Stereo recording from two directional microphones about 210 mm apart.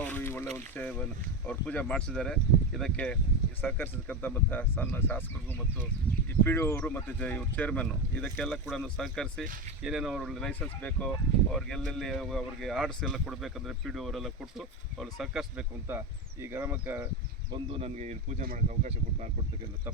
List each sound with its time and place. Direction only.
0.0 s boat: 10° left (ahead or behind)
0.5 s speech: 5° left (ahead or behind)
6.4 s speech: 10° left (ahead or behind); by 17.1 s 10° right (ahead or behind)
17.5 s speech: 25° right (ahead or behind)